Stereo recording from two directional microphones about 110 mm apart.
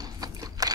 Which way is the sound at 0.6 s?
35° right (ahead or behind).